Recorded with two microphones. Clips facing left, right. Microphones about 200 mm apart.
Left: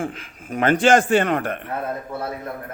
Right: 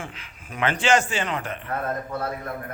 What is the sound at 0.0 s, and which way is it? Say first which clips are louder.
Speech: left 10 dB; 50° left (ahead or behind).